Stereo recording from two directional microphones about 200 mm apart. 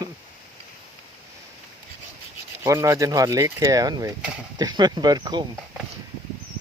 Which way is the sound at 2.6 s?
15° right (ahead or behind).